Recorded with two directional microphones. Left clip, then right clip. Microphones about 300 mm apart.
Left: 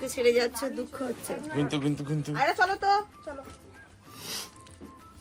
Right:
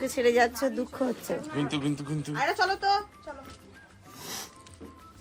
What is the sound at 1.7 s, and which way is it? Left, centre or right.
Speech, centre.